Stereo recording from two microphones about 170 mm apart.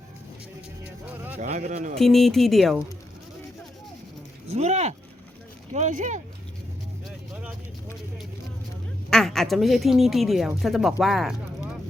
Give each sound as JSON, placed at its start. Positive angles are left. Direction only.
{"t": 1.0, "sound": "music", "side_deg": -10}
{"t": 1.4, "sound": "a man's voice", "side_deg": -45}
{"t": 2.0, "sound": "speech", "side_deg": 0}
{"t": 4.4, "sound": "a man's voice", "side_deg": -40}
{"t": 9.0, "sound": "speech", "side_deg": 5}